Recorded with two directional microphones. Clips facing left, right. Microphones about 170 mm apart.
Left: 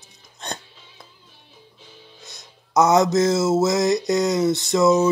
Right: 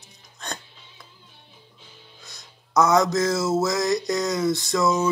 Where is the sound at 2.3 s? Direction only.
20° left (ahead or behind).